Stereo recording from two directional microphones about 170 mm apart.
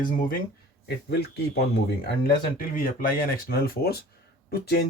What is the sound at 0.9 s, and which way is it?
Speech, 70° left (ahead or behind).